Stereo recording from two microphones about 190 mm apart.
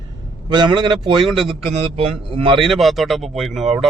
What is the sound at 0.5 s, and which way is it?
Speech, 25° right (ahead or behind).